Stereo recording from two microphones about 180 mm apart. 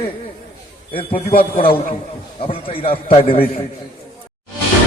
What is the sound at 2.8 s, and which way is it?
Speech, 30° left (ahead or behind).